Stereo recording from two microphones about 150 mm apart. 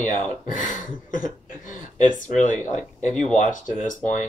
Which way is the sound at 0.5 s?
60° left (ahead or behind).